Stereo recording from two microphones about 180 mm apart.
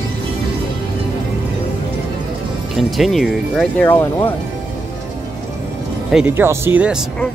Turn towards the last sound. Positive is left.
turn(degrees=-5)  # may be behind; listen again after turning